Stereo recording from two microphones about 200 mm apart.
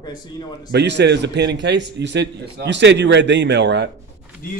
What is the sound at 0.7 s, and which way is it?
A man's voice, 60° right (ahead or behind).